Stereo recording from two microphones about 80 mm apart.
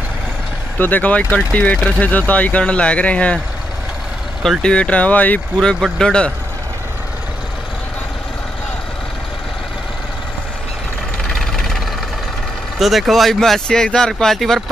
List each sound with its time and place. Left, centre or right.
0.7 s speech: left
4.4 s speech: centre
5.6 s speech: centre
11.2 s vehicle: centre
12.7 s speech: centre